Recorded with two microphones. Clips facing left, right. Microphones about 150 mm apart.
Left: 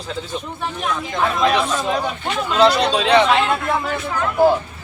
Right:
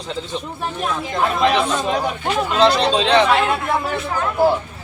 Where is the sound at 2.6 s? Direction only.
5° left (ahead or behind).